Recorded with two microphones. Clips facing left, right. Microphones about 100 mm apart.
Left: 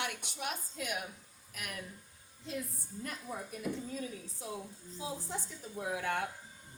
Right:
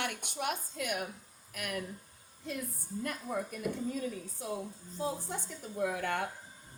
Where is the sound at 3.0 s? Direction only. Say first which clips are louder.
Right 5 dB; 50° right (ahead or behind).